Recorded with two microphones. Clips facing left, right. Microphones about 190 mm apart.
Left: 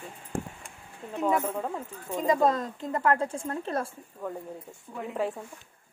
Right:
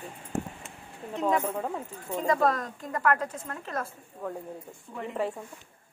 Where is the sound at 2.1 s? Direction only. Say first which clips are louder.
Left 1 dB; 15° left (ahead or behind); by 3.9 s 30° left (ahead or behind).